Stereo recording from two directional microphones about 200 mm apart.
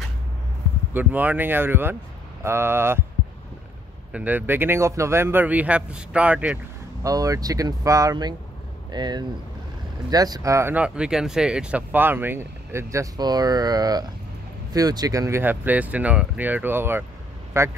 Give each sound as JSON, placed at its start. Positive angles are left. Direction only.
{"t": 0.9, "sound": "a man's voice", "side_deg": -10}
{"t": 4.1, "sound": "a man's voice", "side_deg": -10}